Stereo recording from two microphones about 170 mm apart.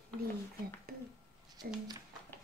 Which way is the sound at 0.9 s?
60° right (ahead or behind).